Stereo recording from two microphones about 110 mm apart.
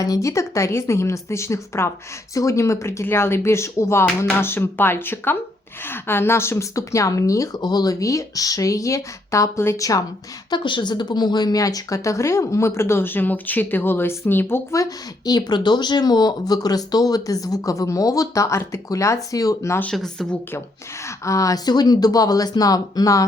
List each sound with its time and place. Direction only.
0.0 s a woman's voice: 30° left (ahead or behind)
10.5 s speech: 45° left (ahead or behind); by 19.8 s 30° left (ahead or behind)
19.8 s speech: 5° left (ahead or behind)
21.2 s speech: 30° left (ahead or behind)